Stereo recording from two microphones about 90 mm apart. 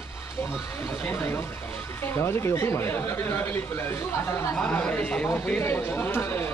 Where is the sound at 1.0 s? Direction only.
25° left (ahead or behind).